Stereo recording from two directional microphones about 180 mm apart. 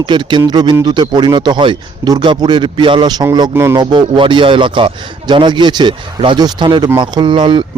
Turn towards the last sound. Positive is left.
turn(degrees=-25)  # may be behind; listen again after turning